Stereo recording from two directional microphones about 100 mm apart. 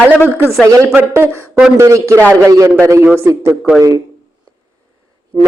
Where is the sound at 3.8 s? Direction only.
35° right (ahead or behind).